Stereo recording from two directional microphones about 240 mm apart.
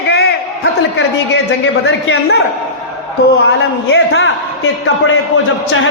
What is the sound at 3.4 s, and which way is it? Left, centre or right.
A man's voice, left.